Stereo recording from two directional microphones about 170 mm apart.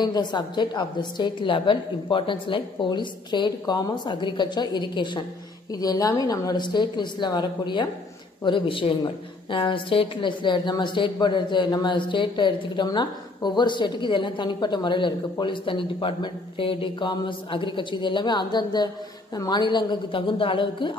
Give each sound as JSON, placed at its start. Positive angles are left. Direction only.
{"t": 0.0, "sound": "a woman's voice", "side_deg": 25}